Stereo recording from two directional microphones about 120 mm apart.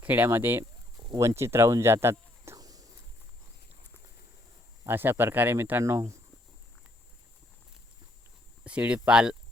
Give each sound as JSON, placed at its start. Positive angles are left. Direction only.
{"t": 0.0, "sound": "speech", "side_deg": -15}
{"t": 1.0, "sound": "a sound", "side_deg": -30}
{"t": 4.8, "sound": "speech", "side_deg": -20}
{"t": 8.6, "sound": "speech", "side_deg": -10}